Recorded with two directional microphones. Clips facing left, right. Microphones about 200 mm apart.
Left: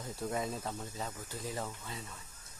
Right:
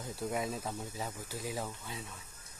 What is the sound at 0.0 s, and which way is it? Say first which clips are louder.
Speech: right 1 dB; centre (ahead or behind).